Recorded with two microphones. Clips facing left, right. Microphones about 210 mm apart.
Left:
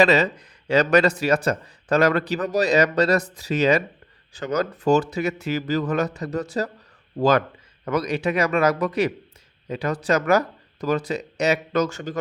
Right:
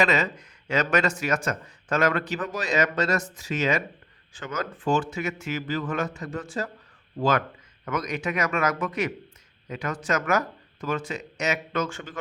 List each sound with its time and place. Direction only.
0.0 s speech: 35° left (ahead or behind)